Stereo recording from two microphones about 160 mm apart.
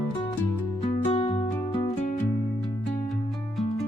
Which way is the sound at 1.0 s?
40° left (ahead or behind).